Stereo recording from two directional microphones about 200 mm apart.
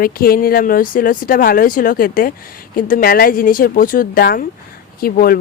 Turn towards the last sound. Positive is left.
turn(degrees=45)  # may be behind; listen again after turning